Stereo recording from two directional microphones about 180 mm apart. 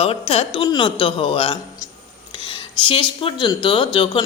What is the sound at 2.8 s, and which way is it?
A man's voice, 30° left (ahead or behind).